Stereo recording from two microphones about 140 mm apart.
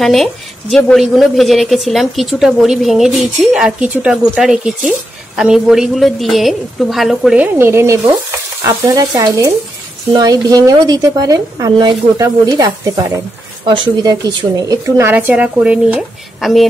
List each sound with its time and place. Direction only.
0.0 s a woman's voice: centre (ahead or behind)
7.5 s a woman's voice: 20° right (ahead or behind); by 16.6 s centre (ahead or behind)